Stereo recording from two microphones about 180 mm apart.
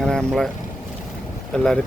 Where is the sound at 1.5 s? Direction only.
5° left (ahead or behind).